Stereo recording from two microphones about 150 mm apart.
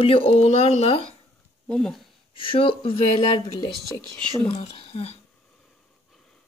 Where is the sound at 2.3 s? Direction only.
35° left (ahead or behind).